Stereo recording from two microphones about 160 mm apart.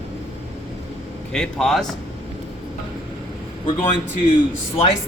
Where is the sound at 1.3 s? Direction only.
Centre (ahead or behind).